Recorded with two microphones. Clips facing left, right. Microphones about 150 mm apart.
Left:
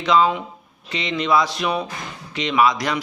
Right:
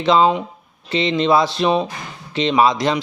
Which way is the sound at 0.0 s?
30° right (ahead or behind).